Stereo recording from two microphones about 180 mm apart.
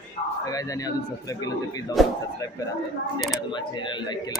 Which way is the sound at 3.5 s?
25° left (ahead or behind).